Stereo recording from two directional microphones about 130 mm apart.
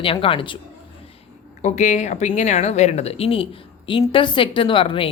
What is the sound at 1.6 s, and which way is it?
A woman's voice, 65° left (ahead or behind).